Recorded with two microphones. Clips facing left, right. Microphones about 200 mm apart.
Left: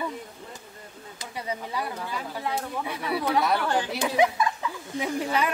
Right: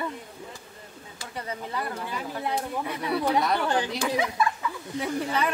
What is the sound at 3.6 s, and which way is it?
Speech, 15° right (ahead or behind).